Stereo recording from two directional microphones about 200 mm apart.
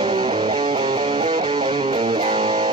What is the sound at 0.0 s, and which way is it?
Music, 20° right (ahead or behind).